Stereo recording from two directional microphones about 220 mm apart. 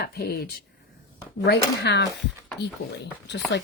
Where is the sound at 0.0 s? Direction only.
45° left (ahead or behind).